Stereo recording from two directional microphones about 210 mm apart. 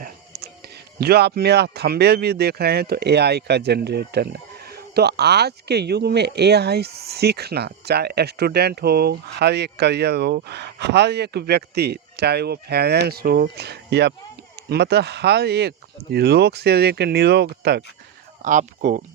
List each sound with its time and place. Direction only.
0.0 s whispering: 50° right (ahead or behind)
0.9 s speech: 50° right (ahead or behind)
18.4 s speech: 35° right (ahead or behind)